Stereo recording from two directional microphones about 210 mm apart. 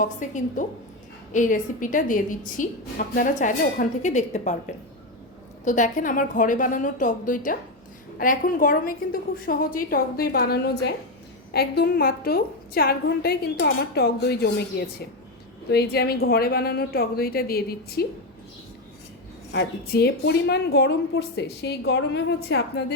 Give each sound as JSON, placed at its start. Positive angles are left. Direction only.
{"t": 0.0, "sound": "a woman's voice", "side_deg": 35}
{"t": 5.6, "sound": "a woman's voice", "side_deg": 35}
{"t": 19.5, "sound": "a woman's voice", "side_deg": 50}